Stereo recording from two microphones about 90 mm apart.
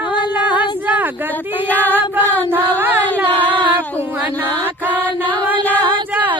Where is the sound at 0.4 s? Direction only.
20° right (ahead or behind).